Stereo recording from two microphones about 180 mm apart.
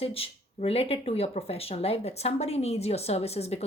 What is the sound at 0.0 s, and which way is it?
Speech, 30° left (ahead or behind).